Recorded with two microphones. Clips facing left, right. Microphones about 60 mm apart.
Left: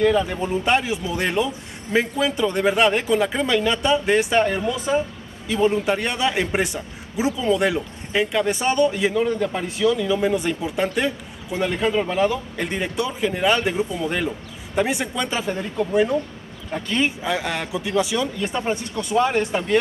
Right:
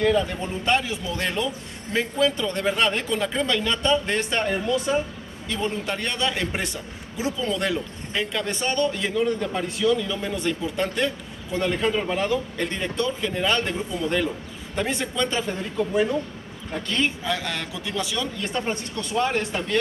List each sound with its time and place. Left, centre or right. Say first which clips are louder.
0.1 s speech: left 3 dB; centre
16.7 s speech: left 3 dB; centre